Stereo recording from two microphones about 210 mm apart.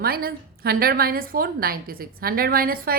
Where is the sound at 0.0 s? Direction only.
45° right (ahead or behind).